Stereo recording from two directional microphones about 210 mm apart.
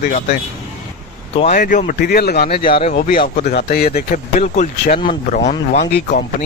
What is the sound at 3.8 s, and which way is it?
Speech, 35° left (ahead or behind).